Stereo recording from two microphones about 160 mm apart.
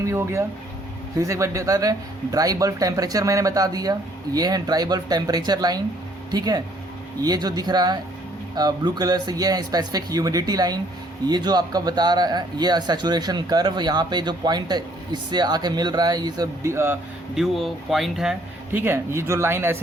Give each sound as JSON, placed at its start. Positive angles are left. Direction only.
{"t": 0.0, "sound": "speech", "side_deg": -15}
{"t": 17.3, "sound": "speech", "side_deg": 0}
{"t": 18.8, "sound": "speech", "side_deg": -15}